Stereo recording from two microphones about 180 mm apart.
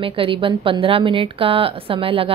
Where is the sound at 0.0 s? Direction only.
30° right (ahead or behind).